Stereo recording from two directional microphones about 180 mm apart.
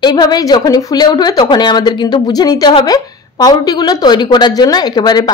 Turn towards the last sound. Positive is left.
turn(degrees=25)  # may be behind; listen again after turning